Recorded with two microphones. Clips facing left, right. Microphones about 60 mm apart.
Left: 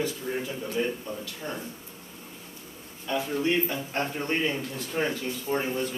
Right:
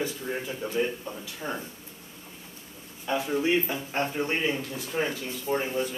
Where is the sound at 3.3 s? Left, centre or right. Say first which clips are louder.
Right 1 dB; centre.